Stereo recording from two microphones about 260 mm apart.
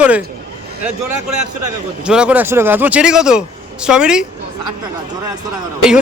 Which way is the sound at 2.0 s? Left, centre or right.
Centre.